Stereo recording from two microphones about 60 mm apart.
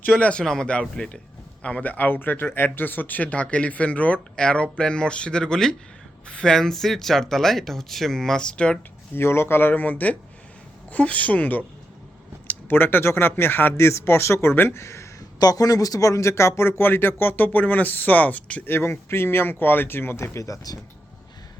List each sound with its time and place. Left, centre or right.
0.0 s speech: left
9.1 s speech: left
15.4 s speech: left
18.6 s speech: left